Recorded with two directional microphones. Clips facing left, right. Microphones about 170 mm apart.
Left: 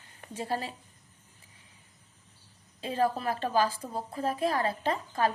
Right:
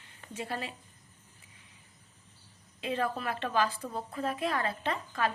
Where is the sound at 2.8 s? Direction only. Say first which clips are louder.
Left 4 dB; 35° left (ahead or behind).